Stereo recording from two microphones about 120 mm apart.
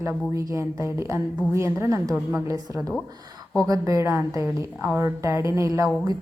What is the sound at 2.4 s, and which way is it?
Speech, 25° right (ahead or behind).